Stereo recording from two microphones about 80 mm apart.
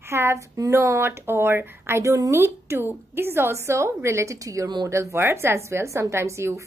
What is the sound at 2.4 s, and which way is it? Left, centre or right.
A woman's voice, right.